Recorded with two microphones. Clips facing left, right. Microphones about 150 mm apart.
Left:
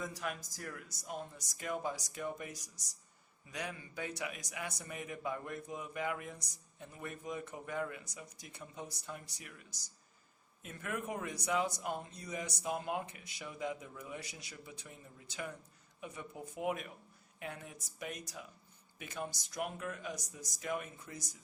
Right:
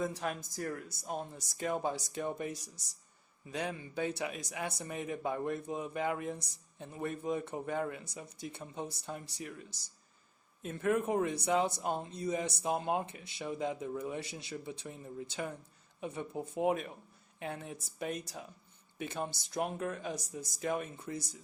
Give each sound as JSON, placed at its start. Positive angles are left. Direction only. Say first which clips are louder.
{"t": 0.0, "sound": "speech", "louder": "right 5 dB", "side_deg": -30}
{"t": 1.0, "sound": "speech", "louder": "right 4 dB", "side_deg": -40}
{"t": 1.4, "sound": "speech", "louder": "right 5 dB", "side_deg": -30}